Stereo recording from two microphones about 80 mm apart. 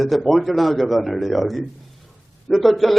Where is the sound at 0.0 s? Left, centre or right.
Centre.